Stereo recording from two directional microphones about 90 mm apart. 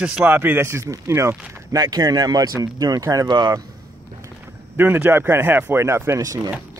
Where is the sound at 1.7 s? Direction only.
45° right (ahead or behind).